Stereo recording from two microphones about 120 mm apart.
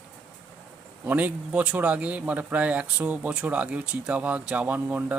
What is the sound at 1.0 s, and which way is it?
Speech, 10° right (ahead or behind).